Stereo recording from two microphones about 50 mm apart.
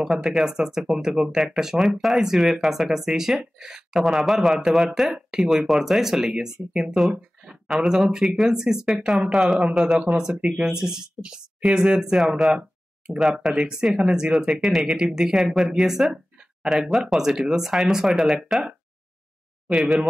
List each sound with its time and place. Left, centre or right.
0.0 s speech: centre
7.7 s speech: centre
13.5 s speech: centre
14.5 s speech: centre
19.7 s speech: centre